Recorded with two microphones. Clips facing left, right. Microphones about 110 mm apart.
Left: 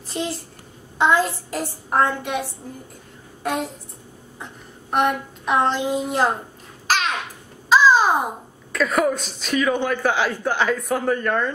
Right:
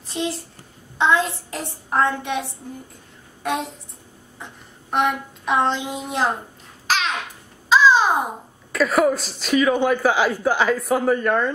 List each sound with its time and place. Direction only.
0.1 s a man's voice: centre (ahead or behind)
3.4 s a man's voice: centre (ahead or behind)
4.9 s a man's voice: centre (ahead or behind)
6.9 s babbling: 5° left (ahead or behind)
8.7 s a man's voice: centre (ahead or behind)